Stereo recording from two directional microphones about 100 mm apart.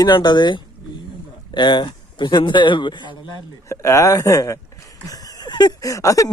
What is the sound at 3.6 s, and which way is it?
Speech, 30° left (ahead or behind).